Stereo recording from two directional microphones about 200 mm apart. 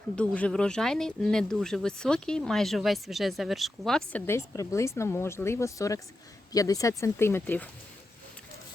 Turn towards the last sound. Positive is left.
turn(degrees=10)  # may be behind; listen again after turning